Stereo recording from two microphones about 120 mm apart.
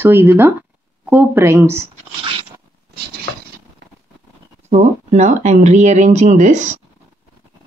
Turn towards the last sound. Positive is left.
turn(degrees=-90)